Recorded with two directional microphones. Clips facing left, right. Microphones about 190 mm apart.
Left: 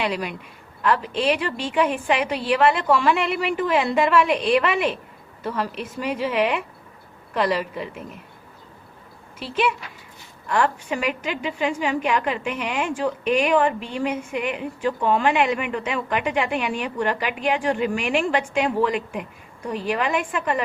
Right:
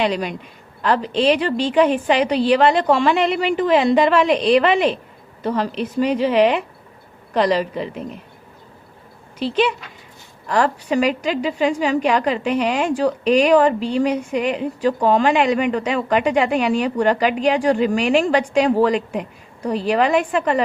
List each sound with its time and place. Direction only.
0.0 s a woman's voice: 30° right (ahead or behind)
9.4 s a woman's voice: 30° right (ahead or behind)